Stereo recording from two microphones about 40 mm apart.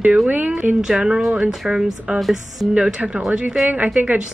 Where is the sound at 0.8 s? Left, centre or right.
Centre.